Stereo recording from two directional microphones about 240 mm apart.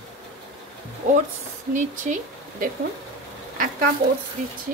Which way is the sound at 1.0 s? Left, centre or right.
Right.